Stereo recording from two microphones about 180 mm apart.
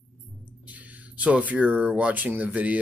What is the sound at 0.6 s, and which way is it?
Speech, 10° right (ahead or behind).